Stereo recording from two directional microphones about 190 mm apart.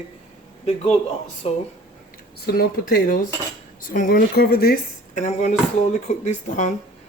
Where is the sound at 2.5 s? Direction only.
50° left (ahead or behind).